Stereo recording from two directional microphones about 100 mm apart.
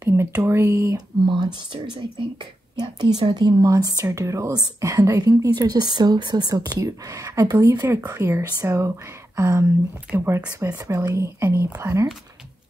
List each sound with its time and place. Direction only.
0.4 s speech: 30° right (ahead or behind)
1.2 s speech: 50° right (ahead or behind); by 11.9 s 25° right (ahead or behind)